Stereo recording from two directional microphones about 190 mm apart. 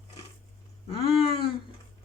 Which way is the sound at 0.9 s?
30° left (ahead or behind).